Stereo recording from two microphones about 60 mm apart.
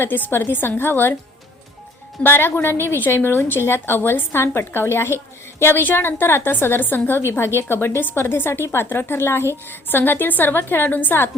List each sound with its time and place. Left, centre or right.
0.0 s a woman's voice: left
2.2 s a woman's voice: left